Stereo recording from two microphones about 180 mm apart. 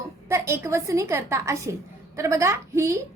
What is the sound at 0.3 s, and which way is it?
A woman's voice, 15° right (ahead or behind).